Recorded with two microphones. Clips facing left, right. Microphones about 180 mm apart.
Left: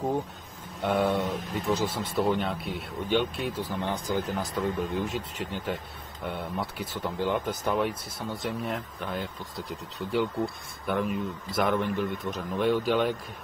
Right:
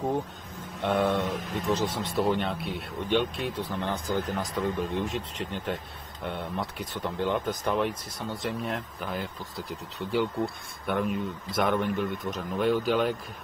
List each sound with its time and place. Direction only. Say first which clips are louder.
0.8 s speech: even; centre (ahead or behind)